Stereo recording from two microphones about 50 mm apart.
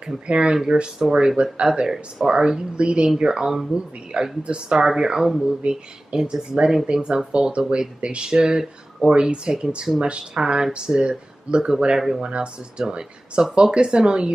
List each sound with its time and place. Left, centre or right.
0.3 s speech: centre